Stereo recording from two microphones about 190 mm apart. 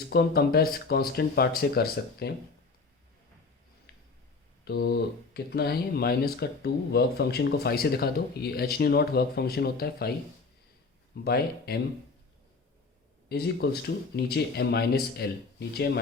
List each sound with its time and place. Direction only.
0.0 s speech: 55° left (ahead or behind)
3.9 s a sound: 55° left (ahead or behind)
4.6 s speech: 55° left (ahead or behind)
11.1 s speech: 55° left (ahead or behind)
13.2 s speech: 55° left (ahead or behind)